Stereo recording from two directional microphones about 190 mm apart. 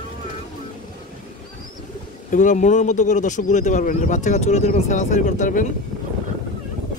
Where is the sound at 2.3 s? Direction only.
40° left (ahead or behind).